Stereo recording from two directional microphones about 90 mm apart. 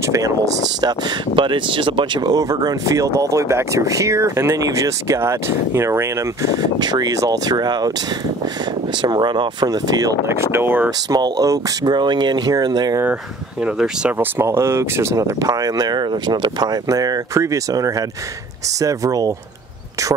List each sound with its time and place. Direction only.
1.3 s speech: 65° right (ahead or behind)
2.3 s speech: 45° right (ahead or behind)
6.6 s speech: 50° right (ahead or behind)
9.0 s speech: 55° right (ahead or behind)
10.2 s speech: 25° right (ahead or behind)
11.1 s speech: 45° right (ahead or behind)
14.1 s speech: 30° right (ahead or behind); by 16.7 s 55° right (ahead or behind)
16.9 s speech: 40° right (ahead or behind)